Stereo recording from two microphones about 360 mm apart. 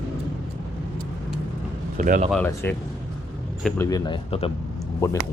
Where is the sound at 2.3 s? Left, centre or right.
Centre.